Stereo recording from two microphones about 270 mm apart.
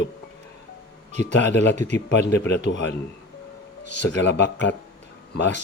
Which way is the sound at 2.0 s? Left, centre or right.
Left.